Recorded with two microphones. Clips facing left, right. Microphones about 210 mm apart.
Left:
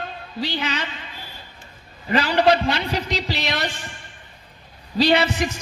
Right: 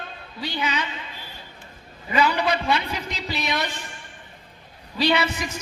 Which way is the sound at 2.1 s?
30° left (ahead or behind).